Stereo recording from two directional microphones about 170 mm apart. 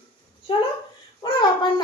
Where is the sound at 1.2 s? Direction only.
30° left (ahead or behind).